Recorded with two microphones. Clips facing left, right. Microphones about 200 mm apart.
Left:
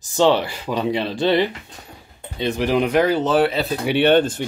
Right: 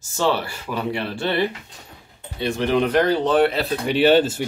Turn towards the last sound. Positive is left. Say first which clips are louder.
# even
turn(degrees=-5)  # may be behind; listen again after turning